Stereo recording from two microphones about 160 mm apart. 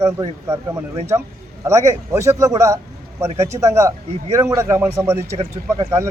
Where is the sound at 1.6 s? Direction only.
20° right (ahead or behind).